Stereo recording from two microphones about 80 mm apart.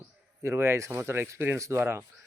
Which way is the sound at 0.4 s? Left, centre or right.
Right.